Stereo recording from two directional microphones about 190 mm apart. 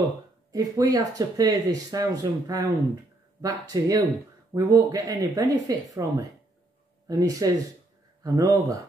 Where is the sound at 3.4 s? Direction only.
15° right (ahead or behind).